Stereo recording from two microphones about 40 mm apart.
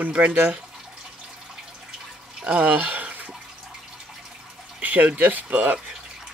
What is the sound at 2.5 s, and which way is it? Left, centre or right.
Speech, right.